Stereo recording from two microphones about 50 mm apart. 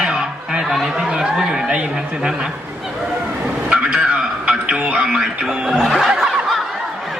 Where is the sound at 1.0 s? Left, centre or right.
Centre.